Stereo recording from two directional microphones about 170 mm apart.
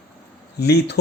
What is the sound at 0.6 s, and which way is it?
Speech, 75° left (ahead or behind).